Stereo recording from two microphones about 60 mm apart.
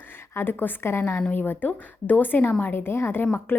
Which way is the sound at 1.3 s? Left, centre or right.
Left.